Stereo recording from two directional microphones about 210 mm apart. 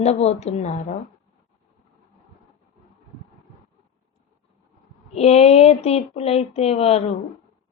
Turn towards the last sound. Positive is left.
turn(degrees=30)  # may be behind; listen again after turning